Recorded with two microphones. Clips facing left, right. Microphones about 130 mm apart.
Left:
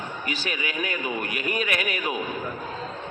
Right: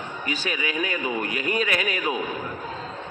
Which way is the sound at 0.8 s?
30° right (ahead or behind).